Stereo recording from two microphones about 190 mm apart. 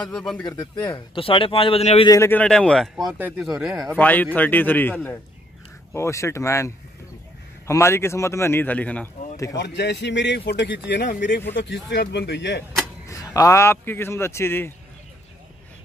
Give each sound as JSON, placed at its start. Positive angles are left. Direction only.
{"t": 0.1, "sound": "speech", "side_deg": 0}
{"t": 0.6, "sound": "speech", "side_deg": 20}
{"t": 2.0, "sound": "a man's voice", "side_deg": 15}
{"t": 9.6, "sound": "speech", "side_deg": 65}
{"t": 13.1, "sound": "a man's voice", "side_deg": 15}